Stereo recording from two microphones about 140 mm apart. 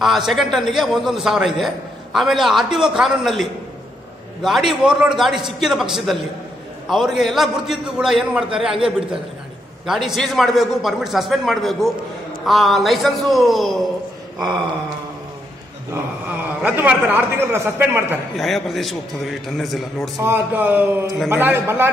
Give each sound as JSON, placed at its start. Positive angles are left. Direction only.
{"t": 0.0, "sound": "a man's voice", "side_deg": 0}
{"t": 9.8, "sound": "a man's voice", "side_deg": 0}
{"t": 15.9, "sound": "a man's voice", "side_deg": -10}
{"t": 18.3, "sound": "a man's voice", "side_deg": 0}
{"t": 20.2, "sound": "a man's voice", "side_deg": -15}